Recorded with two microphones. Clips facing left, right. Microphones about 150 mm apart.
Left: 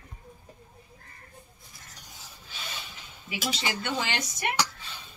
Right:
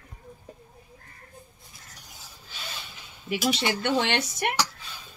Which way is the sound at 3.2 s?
60° right (ahead or behind).